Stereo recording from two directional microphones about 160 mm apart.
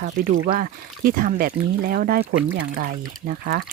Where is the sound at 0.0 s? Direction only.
75° right (ahead or behind).